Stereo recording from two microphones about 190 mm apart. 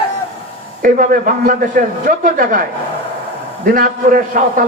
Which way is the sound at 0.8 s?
45° right (ahead or behind).